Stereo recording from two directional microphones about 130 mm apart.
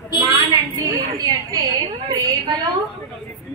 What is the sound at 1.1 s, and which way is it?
Speech, 30° right (ahead or behind).